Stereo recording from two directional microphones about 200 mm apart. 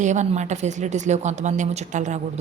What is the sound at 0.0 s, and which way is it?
A woman's voice, 35° right (ahead or behind).